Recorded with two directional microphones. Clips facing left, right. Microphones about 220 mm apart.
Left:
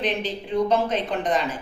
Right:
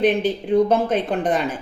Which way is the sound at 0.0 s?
55° right (ahead or behind).